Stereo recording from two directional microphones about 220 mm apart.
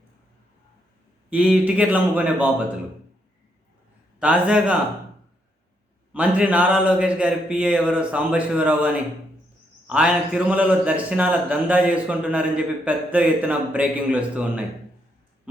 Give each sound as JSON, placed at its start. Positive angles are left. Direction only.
{"t": 1.3, "sound": "a man's voice", "side_deg": -5}
{"t": 4.2, "sound": "speech", "side_deg": -5}
{"t": 6.1, "sound": "speech", "side_deg": -5}